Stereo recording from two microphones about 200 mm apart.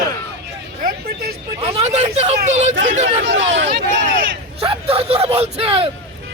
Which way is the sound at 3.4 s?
65° right (ahead or behind).